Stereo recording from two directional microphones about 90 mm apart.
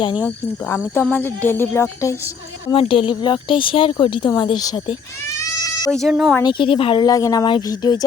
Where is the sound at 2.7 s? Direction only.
80° left.